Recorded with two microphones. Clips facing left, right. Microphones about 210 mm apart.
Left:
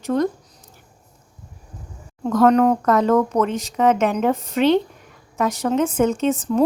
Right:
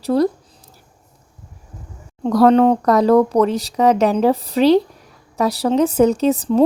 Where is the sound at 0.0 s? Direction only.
35° right (ahead or behind).